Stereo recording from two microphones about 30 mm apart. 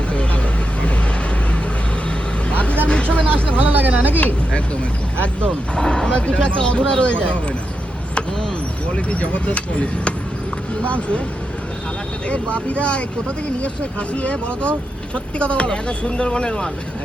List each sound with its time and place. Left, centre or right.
0.1 s vehicle: left
2.5 s vehicle: left
3.6 s speech: right
5.7 s speech: left
9.0 s speech: left
12.3 s speech: left